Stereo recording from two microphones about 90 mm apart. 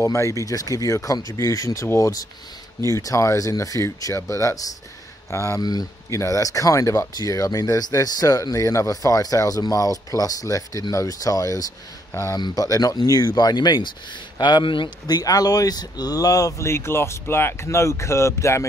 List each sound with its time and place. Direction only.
0.0 s speech: 35° left (ahead or behind)
5.6 s speech: 45° left (ahead or behind)
12.4 s speech: 50° left (ahead or behind)
14.4 s speech: 60° left (ahead or behind)
15.0 s speech: 45° left (ahead or behind)